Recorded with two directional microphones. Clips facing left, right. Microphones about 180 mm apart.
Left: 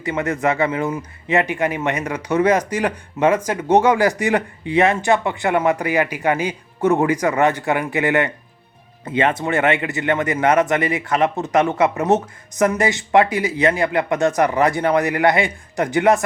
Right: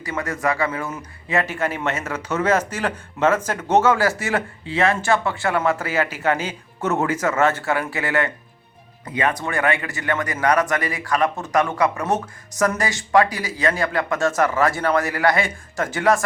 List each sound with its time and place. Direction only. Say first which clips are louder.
0.0 s speech: left 4 dB; 20° left (ahead or behind)